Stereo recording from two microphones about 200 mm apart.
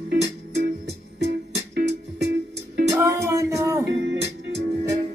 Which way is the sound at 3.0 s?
15° right (ahead or behind).